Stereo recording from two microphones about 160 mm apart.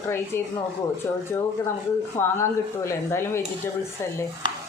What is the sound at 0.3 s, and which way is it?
Speech, 15° left (ahead or behind).